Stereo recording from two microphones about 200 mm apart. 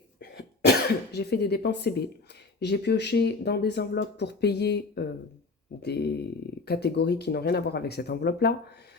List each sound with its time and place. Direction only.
0.2 s cough: 55° left (ahead or behind)
2.6 s speech: 55° left (ahead or behind)